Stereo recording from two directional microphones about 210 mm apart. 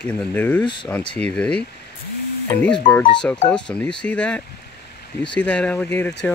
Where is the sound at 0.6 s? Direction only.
20° left (ahead or behind).